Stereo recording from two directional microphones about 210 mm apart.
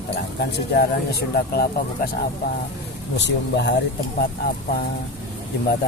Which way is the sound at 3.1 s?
55° left (ahead or behind).